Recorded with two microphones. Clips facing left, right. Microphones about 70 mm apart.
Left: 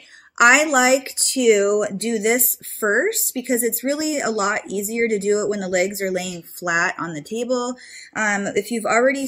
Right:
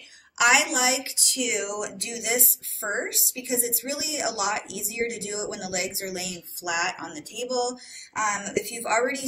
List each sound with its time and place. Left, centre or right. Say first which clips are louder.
0.4 s speech: left 7 dB; left